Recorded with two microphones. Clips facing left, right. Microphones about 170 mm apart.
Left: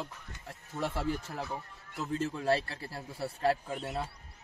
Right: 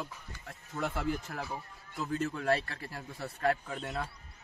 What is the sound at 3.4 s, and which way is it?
Speech, 30° left (ahead or behind).